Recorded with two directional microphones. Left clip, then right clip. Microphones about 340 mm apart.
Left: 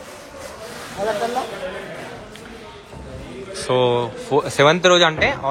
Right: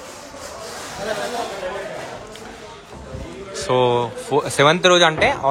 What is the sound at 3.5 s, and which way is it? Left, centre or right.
A man's voice, centre.